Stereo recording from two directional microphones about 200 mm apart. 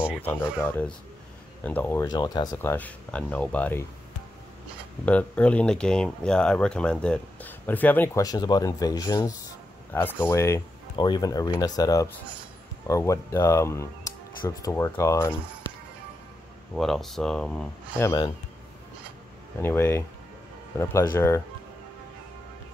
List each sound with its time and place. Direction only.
0.6 s speech: 10° left (ahead or behind)
5.0 s speech: 5° left (ahead or behind)
16.7 s speech: centre (ahead or behind); by 18.3 s 15° left (ahead or behind)
19.6 s speech: 10° left (ahead or behind)